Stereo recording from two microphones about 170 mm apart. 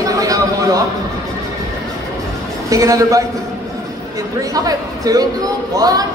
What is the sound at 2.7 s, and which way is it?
Speech, 20° right (ahead or behind).